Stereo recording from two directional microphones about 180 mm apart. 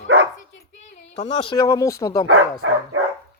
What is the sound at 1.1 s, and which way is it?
Speech, 35° left (ahead or behind).